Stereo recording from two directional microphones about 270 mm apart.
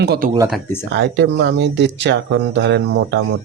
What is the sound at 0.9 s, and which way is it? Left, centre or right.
A man's voice, right.